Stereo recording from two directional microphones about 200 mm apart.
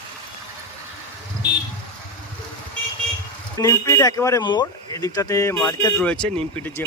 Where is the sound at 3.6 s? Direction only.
15° left (ahead or behind).